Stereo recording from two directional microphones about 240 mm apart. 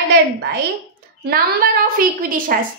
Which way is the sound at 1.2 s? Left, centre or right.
Right.